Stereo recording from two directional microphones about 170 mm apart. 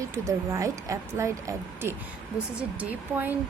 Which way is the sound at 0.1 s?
15° right (ahead or behind).